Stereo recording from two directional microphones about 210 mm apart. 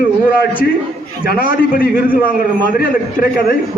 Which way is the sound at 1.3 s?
45° left (ahead or behind).